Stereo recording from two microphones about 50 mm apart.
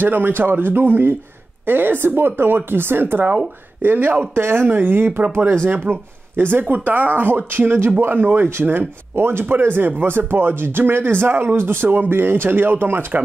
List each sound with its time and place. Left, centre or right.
0.0 s speech: right
4.4 s speech: right